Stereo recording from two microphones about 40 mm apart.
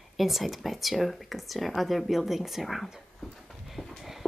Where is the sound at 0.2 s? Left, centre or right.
Centre.